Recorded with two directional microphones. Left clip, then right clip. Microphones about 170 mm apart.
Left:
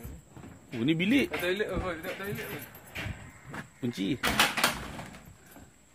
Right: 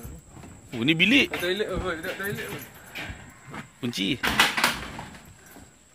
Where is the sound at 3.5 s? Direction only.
15° left (ahead or behind).